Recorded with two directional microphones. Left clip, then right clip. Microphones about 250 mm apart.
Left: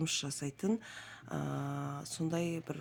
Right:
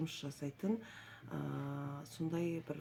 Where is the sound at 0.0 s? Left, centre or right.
Left.